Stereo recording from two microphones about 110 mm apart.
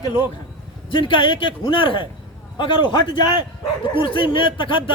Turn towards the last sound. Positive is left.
turn(degrees=50)  # may be behind; listen again after turning